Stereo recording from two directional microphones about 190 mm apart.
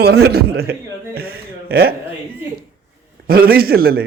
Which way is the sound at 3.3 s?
50° right (ahead or behind).